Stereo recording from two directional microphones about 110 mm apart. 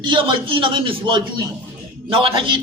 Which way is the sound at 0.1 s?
50° right (ahead or behind).